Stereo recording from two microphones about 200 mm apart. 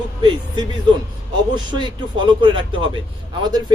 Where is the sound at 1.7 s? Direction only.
25° right (ahead or behind).